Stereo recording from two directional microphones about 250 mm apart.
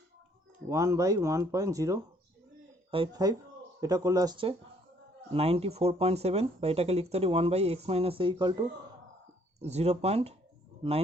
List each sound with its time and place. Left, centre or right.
0.7 s speech: centre